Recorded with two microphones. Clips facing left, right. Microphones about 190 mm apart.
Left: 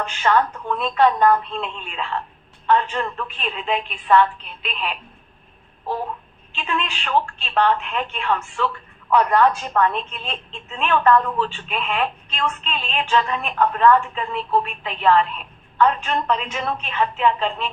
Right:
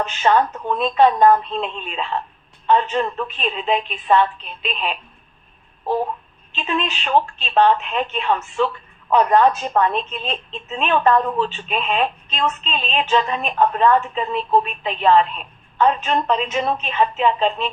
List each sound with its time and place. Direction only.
0.0 s a woman's voice: 20° right (ahead or behind)
6.6 s a woman's voice: 20° right (ahead or behind)